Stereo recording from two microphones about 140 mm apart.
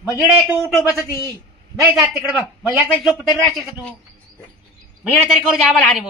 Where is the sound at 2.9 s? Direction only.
5° left (ahead or behind).